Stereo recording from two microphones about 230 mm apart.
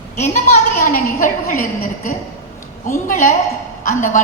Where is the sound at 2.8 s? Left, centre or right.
Left.